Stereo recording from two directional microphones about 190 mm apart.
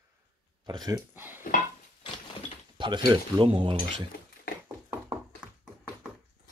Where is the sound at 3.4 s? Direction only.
25° right (ahead or behind).